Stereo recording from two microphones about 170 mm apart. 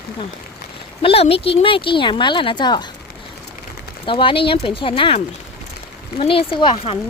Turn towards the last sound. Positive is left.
turn(degrees=30)  # may be behind; listen again after turning